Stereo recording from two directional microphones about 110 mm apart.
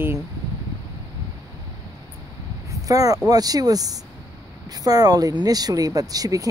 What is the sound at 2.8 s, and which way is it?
Speech, 30° right (ahead or behind).